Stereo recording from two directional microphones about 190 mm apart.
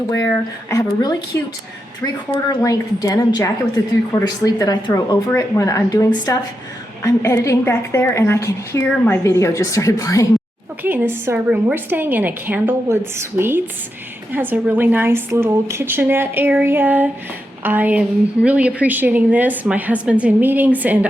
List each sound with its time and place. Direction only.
0.1 s a woman's voice: 15° left (ahead or behind)
2.6 s a woman's voice: 20° left (ahead or behind)
10.8 s a woman's voice: 10° right (ahead or behind)